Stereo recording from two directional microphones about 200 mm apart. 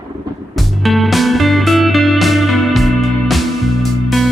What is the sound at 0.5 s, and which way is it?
Music, centre (ahead or behind).